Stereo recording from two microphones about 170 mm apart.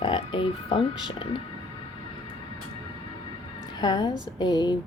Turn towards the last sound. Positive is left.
turn(degrees=25)  # may be behind; listen again after turning